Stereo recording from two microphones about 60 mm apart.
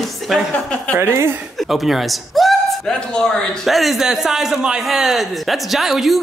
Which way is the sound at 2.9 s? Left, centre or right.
Centre.